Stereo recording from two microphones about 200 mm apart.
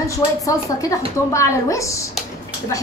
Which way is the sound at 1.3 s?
15° left (ahead or behind).